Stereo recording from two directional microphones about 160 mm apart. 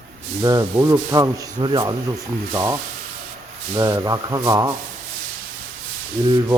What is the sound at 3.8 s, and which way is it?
Speech, 20° right (ahead or behind).